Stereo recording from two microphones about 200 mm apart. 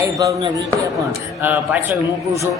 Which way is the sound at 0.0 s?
15° right (ahead or behind).